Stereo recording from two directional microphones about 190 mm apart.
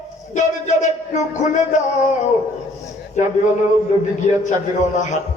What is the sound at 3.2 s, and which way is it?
Speech, 40° left (ahead or behind).